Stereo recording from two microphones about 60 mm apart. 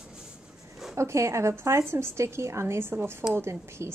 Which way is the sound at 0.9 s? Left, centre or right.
Right.